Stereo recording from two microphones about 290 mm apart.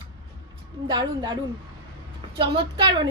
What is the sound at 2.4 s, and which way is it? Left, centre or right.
Speech, centre.